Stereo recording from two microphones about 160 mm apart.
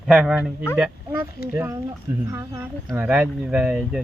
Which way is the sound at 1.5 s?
20° right (ahead or behind).